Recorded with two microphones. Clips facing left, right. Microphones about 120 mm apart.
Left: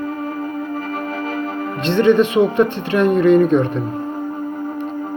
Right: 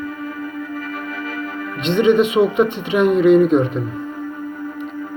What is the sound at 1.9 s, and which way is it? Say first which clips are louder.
Speech: left 1 dB; 10° right (ahead or behind).